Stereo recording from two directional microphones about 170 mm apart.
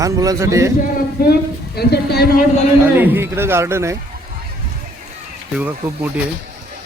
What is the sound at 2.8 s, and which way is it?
Speech, 10° right (ahead or behind).